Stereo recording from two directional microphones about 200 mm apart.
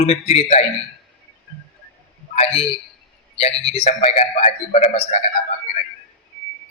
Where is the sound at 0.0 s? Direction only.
30° left (ahead or behind).